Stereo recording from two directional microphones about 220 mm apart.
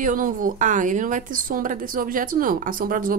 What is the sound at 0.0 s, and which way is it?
A woman's voice, 40° right (ahead or behind).